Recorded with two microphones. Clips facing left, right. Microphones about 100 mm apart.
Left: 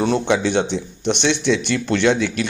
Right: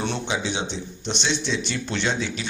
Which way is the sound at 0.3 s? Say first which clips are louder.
Left 9 dB; 60° left (ahead or behind).